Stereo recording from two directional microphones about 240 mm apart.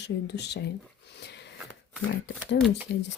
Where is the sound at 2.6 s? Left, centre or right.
Centre.